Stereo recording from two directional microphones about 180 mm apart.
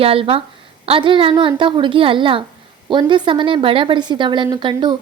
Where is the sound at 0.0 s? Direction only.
30° right (ahead or behind).